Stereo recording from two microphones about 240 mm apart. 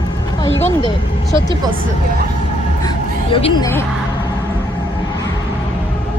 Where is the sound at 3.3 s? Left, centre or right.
Centre.